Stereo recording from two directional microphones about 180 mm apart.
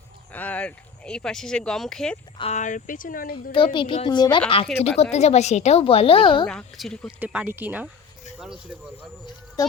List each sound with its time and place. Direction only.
0.3 s speech: 10° left (ahead or behind)
2.4 s speech: 40° left (ahead or behind)
3.5 s a woman's voice: 25° left (ahead or behind)
6.5 s speech: 5° left (ahead or behind)
7.2 s speech: 10° right (ahead or behind)